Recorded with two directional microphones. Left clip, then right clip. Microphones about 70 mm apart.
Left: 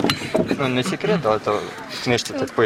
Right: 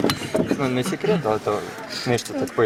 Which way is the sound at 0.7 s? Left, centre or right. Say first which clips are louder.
Left 2 dB; centre.